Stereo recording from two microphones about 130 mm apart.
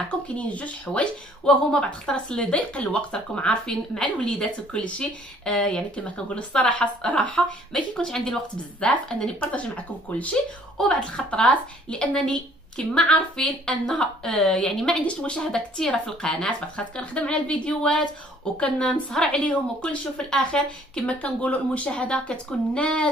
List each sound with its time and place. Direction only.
0.3 s speech: 10° left (ahead or behind)